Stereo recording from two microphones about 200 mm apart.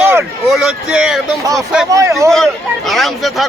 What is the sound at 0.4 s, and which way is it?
Speech, centre (ahead or behind).